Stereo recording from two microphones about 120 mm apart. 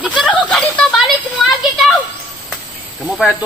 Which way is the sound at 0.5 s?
10° left (ahead or behind).